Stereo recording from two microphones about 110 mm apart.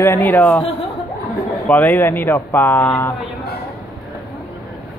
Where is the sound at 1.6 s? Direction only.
15° left (ahead or behind).